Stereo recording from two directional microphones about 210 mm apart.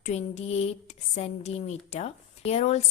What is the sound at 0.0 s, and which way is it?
A woman's voice, 30° left (ahead or behind).